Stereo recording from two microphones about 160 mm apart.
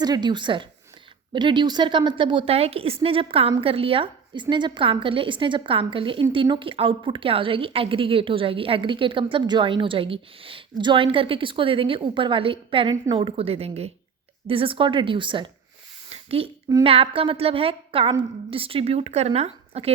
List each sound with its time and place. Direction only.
0.0 s a woman's voice: 25° right (ahead or behind)
16.0 s a sound: 40° right (ahead or behind)
16.8 s a woman's voice: 35° right (ahead or behind)